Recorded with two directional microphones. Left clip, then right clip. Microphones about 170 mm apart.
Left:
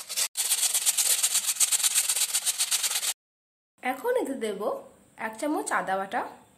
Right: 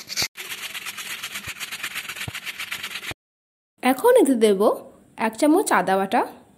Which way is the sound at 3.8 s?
60° right (ahead or behind).